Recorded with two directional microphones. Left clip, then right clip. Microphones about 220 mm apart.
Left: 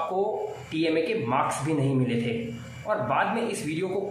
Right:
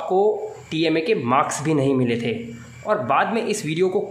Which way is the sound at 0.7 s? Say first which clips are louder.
Right 6 dB; 50° right (ahead or behind).